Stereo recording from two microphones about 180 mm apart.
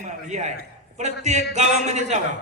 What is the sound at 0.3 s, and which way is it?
A man's voice, 40° right (ahead or behind).